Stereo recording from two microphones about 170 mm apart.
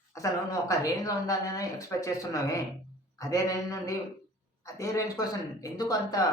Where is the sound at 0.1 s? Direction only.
20° left (ahead or behind).